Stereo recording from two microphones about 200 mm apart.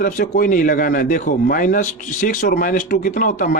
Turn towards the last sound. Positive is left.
turn(degrees=40)  # may be behind; listen again after turning